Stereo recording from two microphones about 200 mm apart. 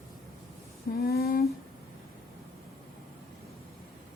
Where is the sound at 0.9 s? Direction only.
50° left (ahead or behind).